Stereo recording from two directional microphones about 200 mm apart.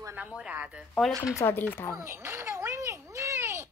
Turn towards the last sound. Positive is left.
turn(degrees=-15)  # may be behind; listen again after turning